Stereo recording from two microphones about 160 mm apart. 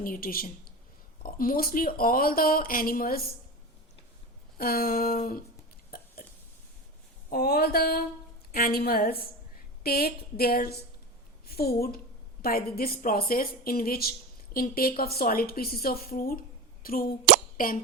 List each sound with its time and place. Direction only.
0.0 s speech: 65° left (ahead or behind)
4.5 s a woman's voice: 70° left (ahead or behind)
6.2 s hiccup: 60° left (ahead or behind)
7.3 s a woman's voice: 70° left (ahead or behind)
11.4 s a sound: 75° left (ahead or behind)
12.4 s a woman's voice: 70° left (ahead or behind)